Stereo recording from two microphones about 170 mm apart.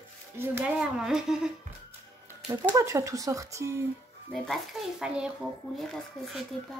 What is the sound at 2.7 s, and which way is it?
Speech, 15° right (ahead or behind).